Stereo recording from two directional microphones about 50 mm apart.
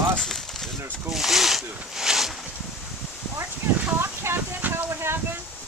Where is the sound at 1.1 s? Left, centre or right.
Centre.